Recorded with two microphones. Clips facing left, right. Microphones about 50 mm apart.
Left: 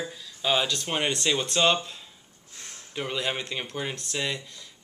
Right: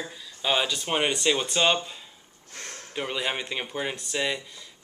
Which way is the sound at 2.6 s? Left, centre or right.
Right.